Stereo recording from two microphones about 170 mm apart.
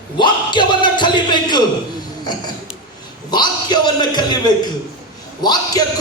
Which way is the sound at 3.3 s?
25° left (ahead or behind).